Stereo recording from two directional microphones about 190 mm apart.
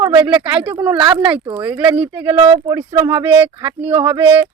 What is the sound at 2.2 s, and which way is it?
Speech, 30° right (ahead or behind).